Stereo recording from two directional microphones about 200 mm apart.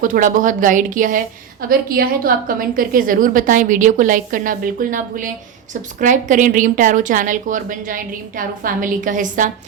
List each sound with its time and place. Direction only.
0.0 s a woman's voice: 40° right (ahead or behind)